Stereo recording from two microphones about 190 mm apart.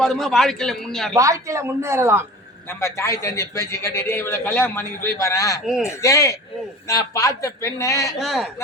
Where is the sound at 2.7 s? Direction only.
15° left (ahead or behind).